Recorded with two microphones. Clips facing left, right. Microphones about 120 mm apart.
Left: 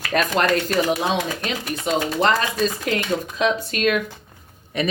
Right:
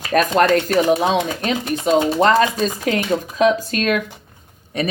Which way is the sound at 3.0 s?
40° right (ahead or behind).